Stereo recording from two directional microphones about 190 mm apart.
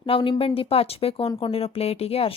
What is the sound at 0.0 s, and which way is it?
A woman's voice, 30° left (ahead or behind).